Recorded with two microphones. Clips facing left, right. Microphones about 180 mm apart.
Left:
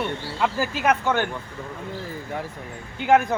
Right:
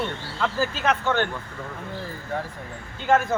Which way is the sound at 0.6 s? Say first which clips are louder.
Even; 10° left (ahead or behind).